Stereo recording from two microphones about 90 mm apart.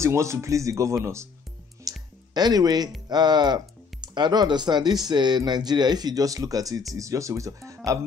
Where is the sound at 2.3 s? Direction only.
45° right (ahead or behind).